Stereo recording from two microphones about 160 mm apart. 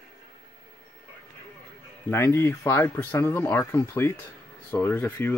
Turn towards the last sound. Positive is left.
turn(degrees=15)  # may be behind; listen again after turning